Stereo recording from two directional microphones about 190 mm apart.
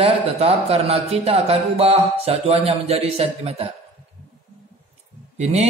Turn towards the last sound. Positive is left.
turn(degrees=-35)  # may be behind; listen again after turning